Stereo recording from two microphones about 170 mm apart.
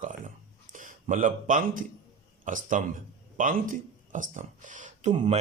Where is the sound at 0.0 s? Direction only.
50° right (ahead or behind).